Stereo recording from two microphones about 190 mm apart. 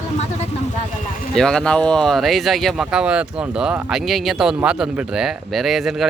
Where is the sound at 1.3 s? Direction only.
5° left (ahead or behind).